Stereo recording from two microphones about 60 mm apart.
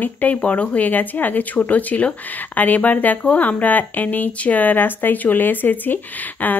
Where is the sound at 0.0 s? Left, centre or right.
Left.